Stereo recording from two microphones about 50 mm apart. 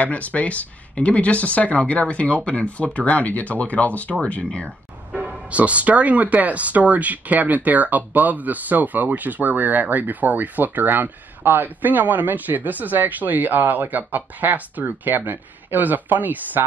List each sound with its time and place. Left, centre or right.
0.0 s speech: left
5.5 s speech: right